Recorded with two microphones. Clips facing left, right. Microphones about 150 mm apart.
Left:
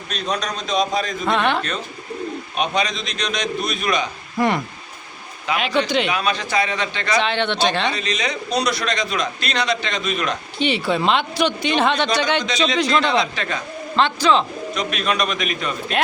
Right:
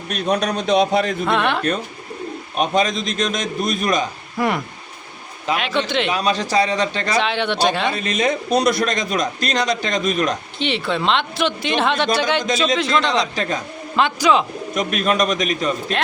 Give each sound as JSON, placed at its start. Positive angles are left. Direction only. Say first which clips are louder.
{"t": 0.1, "sound": "a man's voice", "louder": "right 5 dB", "side_deg": -60}
{"t": 1.2, "sound": "speech", "louder": "even", "side_deg": 0}
{"t": 2.6, "sound": "a man's voice", "louder": "right 4 dB", "side_deg": -45}
{"t": 4.4, "sound": "speech", "louder": "left 1 dB", "side_deg": -5}
{"t": 6.1, "sound": "a man's voice", "louder": "right 3 dB", "side_deg": -40}
{"t": 7.2, "sound": "speech", "louder": "right 1 dB", "side_deg": -5}
{"t": 7.9, "sound": "a man's voice", "louder": "right 4 dB", "side_deg": -50}
{"t": 10.6, "sound": "speech", "louder": "left 3 dB", "side_deg": 5}
{"t": 13.3, "sound": "a man's voice", "louder": "right 3 dB", "side_deg": -40}
{"t": 13.9, "sound": "speech", "louder": "right 1 dB", "side_deg": -10}
{"t": 14.8, "sound": "a man's voice", "louder": "right 4 dB", "side_deg": -45}